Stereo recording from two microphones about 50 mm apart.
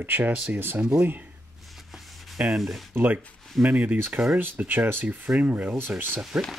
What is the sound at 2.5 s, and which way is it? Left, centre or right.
Speech, centre.